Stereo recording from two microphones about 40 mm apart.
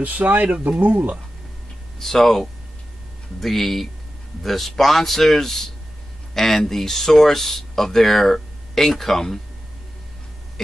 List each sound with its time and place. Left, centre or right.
0.0 s speech: right
2.0 s a man's voice: centre